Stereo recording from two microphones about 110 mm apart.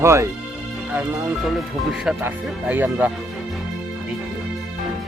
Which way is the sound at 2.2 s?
15° right (ahead or behind).